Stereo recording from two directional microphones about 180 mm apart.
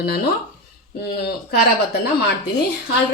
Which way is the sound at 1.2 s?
60° left (ahead or behind).